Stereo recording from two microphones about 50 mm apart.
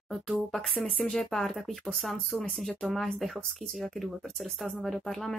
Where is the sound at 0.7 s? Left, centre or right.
Left.